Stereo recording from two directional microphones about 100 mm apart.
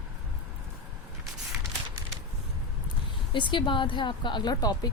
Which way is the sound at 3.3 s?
50° left (ahead or behind).